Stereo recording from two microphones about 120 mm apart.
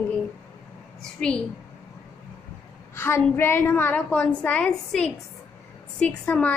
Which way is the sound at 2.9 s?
20° left (ahead or behind).